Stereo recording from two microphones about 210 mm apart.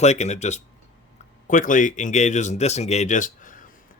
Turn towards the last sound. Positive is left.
turn(degrees=40)  # may be behind; listen again after turning